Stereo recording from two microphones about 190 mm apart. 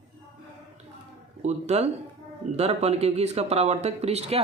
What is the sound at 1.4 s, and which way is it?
Speech, 35° right (ahead or behind).